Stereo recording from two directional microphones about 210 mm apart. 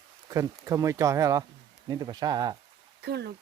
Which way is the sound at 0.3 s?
15° right (ahead or behind).